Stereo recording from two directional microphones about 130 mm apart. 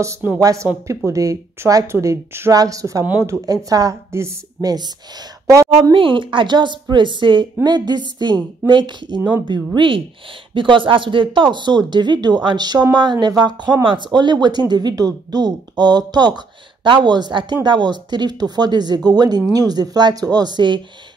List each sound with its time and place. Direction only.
0.0 s a woman's voice: 20° right (ahead or behind); by 20.8 s 35° right (ahead or behind)